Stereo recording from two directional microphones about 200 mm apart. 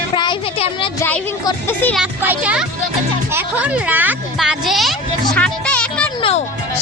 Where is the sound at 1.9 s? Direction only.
5° right (ahead or behind).